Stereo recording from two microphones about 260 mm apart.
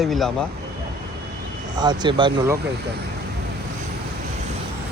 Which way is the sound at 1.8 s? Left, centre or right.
Centre.